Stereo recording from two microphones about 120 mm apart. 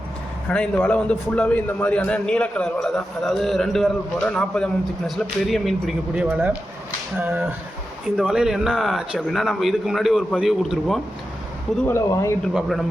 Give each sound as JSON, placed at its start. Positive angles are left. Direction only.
{"t": 0.5, "sound": "a man's voice", "side_deg": 10}
{"t": 6.2, "sound": "a man's voice", "side_deg": -10}
{"t": 11.9, "sound": "speech", "side_deg": 25}
{"t": 12.5, "sound": "a man's voice", "side_deg": 0}